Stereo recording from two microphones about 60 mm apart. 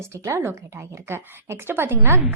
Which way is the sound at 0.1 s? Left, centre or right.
Right.